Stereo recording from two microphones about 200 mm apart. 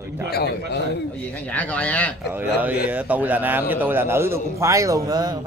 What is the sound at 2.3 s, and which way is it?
A man's voice, 10° right (ahead or behind).